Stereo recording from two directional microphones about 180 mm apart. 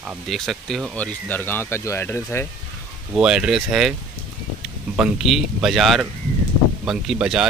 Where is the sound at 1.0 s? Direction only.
10° left (ahead or behind).